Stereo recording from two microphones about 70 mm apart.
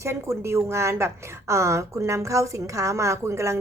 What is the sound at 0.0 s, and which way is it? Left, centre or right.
A woman's voice, right.